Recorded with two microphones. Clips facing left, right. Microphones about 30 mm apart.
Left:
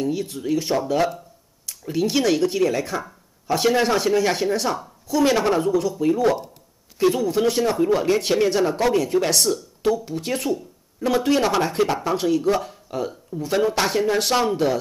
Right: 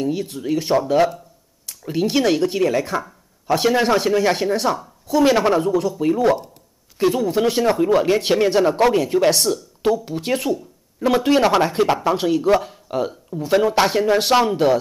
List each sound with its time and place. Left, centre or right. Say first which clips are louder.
0.0 s speech: right 2 dB; centre
5.7 s speech: right 1 dB; centre